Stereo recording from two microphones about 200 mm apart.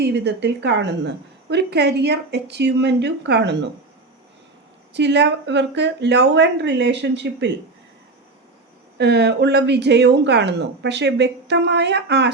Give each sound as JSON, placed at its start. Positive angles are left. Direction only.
{"t": 0.0, "sound": "a woman's voice", "side_deg": -60}
{"t": 4.9, "sound": "a woman's voice", "side_deg": -60}
{"t": 9.0, "sound": "a woman's voice", "side_deg": -55}